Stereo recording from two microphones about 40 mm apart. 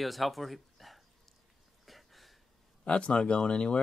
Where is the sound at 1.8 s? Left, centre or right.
Centre.